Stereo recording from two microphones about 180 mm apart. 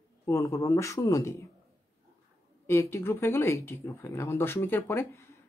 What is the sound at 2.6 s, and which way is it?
Speech, 15° left (ahead or behind).